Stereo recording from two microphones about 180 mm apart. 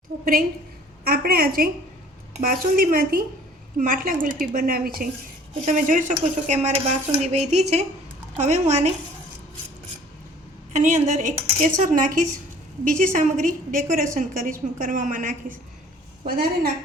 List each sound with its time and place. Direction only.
1.0 s a woman's voice: 60° right (ahead or behind)
5.6 s dishes: 45° right (ahead or behind)
10.7 s a woman's voice: 40° right (ahead or behind)